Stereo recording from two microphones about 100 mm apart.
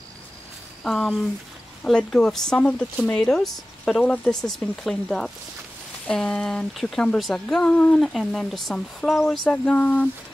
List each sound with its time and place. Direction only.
0.8 s speech: 5° left (ahead or behind)
4.0 s speech: 15° left (ahead or behind)
4.3 s speech: 5° left (ahead or behind)
9.4 s speech: 10° left (ahead or behind)